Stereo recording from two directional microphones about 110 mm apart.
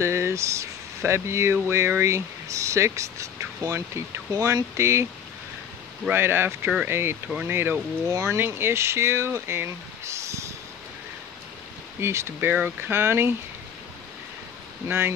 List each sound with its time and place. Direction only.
0.0 s speech: 25° right (ahead or behind)
6.0 s speech: 20° right (ahead or behind)
12.0 s speech: 25° right (ahead or behind)
14.9 s speech: 20° right (ahead or behind)